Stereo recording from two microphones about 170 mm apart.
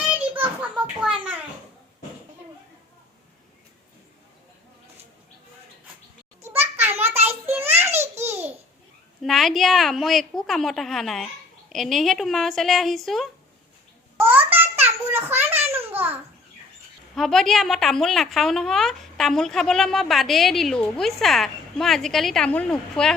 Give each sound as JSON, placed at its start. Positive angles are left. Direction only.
{"t": 0.2, "sound": "children playing", "side_deg": -10}
{"t": 6.4, "sound": "a sound", "side_deg": -15}
{"t": 8.1, "sound": "babbling", "side_deg": -40}
{"t": 9.2, "sound": "a woman's voice", "side_deg": 0}
{"t": 14.3, "sound": "a sound", "side_deg": -10}
{"t": 16.0, "sound": "babbling", "side_deg": -10}
{"t": 17.2, "sound": "a woman's voice", "side_deg": 0}